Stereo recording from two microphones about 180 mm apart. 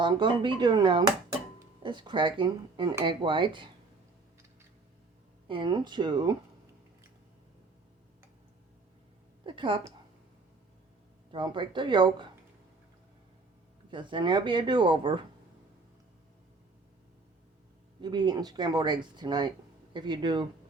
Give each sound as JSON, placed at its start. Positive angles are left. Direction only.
{"t": 0.0, "sound": "speech", "side_deg": -25}
{"t": 5.5, "sound": "speech", "side_deg": -25}
{"t": 9.5, "sound": "a woman's voice", "side_deg": -30}
{"t": 11.3, "sound": "speech", "side_deg": -25}
{"t": 13.9, "sound": "speech", "side_deg": -25}
{"t": 18.0, "sound": "speech", "side_deg": -25}